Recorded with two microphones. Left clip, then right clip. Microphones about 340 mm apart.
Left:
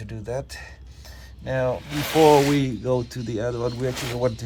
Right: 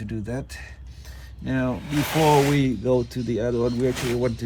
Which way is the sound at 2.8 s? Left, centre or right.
Left.